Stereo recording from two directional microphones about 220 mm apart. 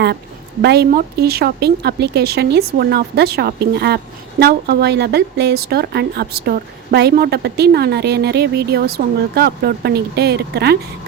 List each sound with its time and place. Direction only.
0.6 s a woman's voice: 45° right (ahead or behind)